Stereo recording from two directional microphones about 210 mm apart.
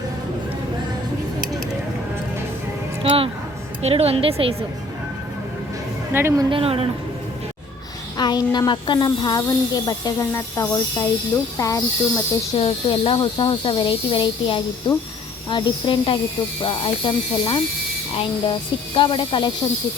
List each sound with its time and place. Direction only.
3.0 s speech: 25° right (ahead or behind)
6.1 s speech: 10° right (ahead or behind)
6.5 s speech: 25° right (ahead or behind)
8.2 s speech: 20° left (ahead or behind)
18.9 s speech: 25° left (ahead or behind)